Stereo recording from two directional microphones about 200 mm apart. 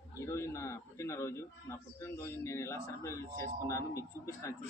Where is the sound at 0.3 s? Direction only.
15° left (ahead or behind).